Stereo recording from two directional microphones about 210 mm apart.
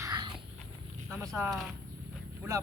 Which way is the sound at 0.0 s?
20° right (ahead or behind).